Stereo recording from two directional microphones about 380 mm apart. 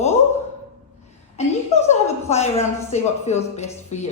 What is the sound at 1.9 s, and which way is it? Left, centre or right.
A woman's voice, centre.